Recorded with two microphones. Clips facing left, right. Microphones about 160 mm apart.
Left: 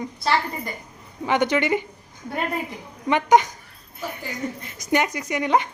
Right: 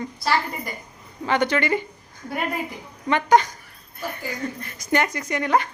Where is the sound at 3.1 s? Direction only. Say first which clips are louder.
Left 1 dB; 15° left (ahead or behind).